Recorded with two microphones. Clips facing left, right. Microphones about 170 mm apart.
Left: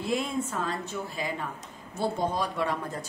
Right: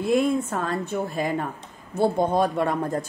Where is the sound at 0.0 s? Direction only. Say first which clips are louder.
Right 8 dB; 55° right (ahead or behind).